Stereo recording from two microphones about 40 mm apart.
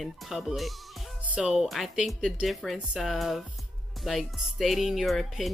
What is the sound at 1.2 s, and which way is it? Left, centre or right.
Music, right.